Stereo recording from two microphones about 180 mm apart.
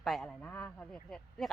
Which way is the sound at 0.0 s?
Centre (ahead or behind).